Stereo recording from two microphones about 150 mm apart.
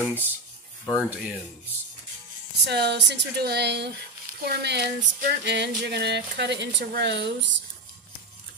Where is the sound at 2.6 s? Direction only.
90° right.